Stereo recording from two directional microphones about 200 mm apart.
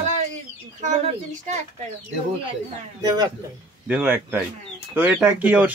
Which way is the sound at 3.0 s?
20° right (ahead or behind).